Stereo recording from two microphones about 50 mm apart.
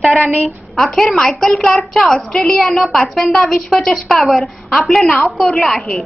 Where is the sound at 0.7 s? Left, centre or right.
Centre.